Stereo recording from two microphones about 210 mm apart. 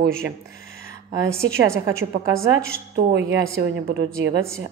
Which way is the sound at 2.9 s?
55° right (ahead or behind).